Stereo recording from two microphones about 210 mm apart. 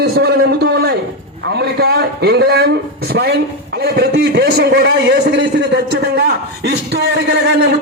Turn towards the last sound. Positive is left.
turn(degrees=-50)  # may be behind; listen again after turning